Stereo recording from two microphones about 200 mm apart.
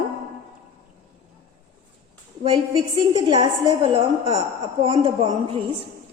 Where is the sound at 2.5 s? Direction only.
25° right (ahead or behind).